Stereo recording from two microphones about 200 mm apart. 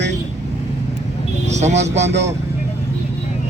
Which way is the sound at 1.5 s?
35° right (ahead or behind).